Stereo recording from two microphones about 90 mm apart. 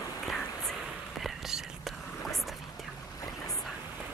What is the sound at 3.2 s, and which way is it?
Boat, 40° left (ahead or behind).